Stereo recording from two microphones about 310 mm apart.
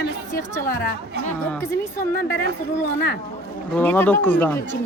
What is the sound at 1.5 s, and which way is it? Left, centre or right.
Speech, centre.